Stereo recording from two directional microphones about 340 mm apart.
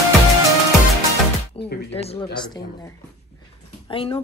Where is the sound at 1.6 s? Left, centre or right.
Left.